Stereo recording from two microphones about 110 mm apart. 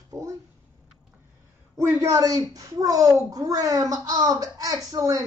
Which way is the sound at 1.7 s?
30° right (ahead or behind).